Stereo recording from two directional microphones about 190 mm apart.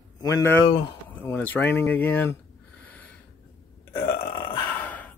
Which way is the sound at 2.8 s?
10° left (ahead or behind).